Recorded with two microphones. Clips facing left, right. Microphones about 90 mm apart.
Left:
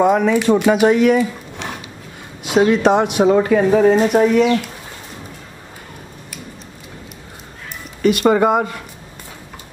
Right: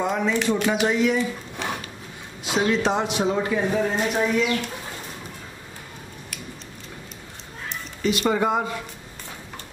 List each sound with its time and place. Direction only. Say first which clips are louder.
0.0 s speech: left 9 dB; 60° left (ahead or behind)
0.7 s speech: left 9 dB; 60° left (ahead or behind)
2.4 s speech: left 8 dB; 60° left (ahead or behind)
8.0 s speech: left 8 dB; 55° left (ahead or behind)